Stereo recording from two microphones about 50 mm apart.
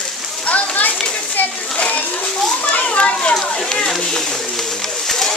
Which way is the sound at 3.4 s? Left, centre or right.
Centre.